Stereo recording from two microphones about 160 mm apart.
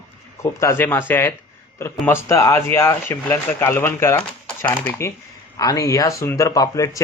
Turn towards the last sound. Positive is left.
turn(degrees=20)  # may be behind; listen again after turning